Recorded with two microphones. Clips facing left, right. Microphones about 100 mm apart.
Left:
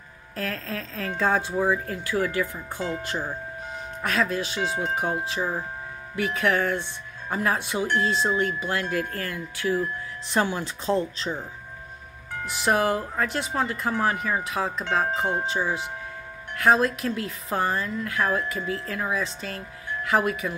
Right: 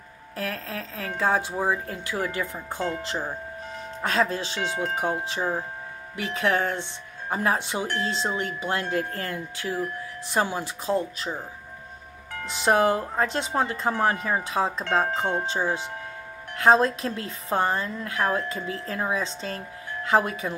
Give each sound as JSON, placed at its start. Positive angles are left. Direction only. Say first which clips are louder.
{"t": 0.4, "sound": "speech", "louder": "left 1 dB", "side_deg": -15}
{"t": 4.0, "sound": "speech", "louder": "right 1 dB", "side_deg": -30}
{"t": 4.6, "sound": "tubular bells", "louder": "even", "side_deg": 20}
{"t": 6.1, "sound": "speech", "louder": "left 1 dB", "side_deg": -20}
{"t": 12.4, "sound": "speech", "louder": "right 2 dB", "side_deg": -25}